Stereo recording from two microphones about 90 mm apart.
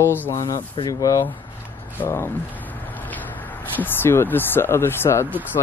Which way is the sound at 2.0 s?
25° left (ahead or behind).